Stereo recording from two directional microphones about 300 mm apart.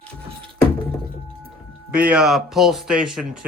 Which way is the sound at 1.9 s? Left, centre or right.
Centre.